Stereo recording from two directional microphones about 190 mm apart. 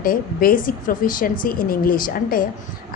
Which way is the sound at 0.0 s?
50° left (ahead or behind).